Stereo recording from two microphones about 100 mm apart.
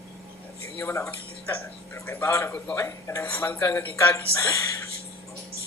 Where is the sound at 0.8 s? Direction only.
25° left (ahead or behind).